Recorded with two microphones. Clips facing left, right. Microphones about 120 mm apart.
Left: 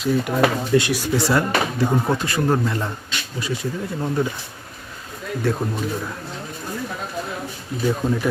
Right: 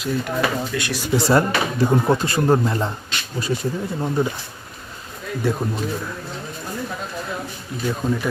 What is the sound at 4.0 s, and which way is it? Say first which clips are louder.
Speech: even; 10° right (ahead or behind).